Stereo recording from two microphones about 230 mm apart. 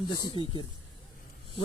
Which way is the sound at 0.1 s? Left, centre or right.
Centre.